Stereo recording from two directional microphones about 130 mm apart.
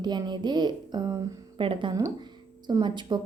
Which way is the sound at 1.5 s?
45° right (ahead or behind).